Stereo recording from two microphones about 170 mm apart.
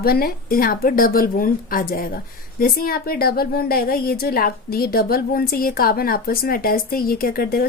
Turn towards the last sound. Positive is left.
turn(degrees=60)  # may be behind; listen again after turning